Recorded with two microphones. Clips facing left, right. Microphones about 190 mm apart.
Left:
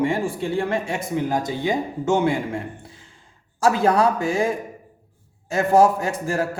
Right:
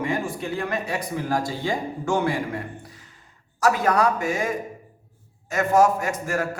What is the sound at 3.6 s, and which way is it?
A man's voice, 30° left (ahead or behind).